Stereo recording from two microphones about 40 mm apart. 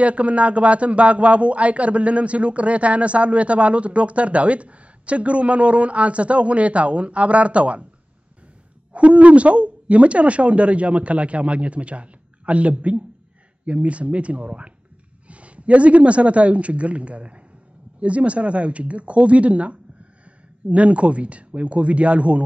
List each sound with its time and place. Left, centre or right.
0.0 s speech: right
8.9 s a woman's voice: right